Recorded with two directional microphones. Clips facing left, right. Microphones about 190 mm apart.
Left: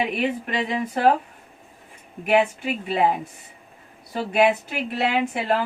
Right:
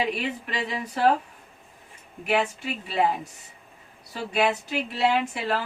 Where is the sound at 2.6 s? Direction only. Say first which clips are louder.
Left 6 dB; 55° left (ahead or behind).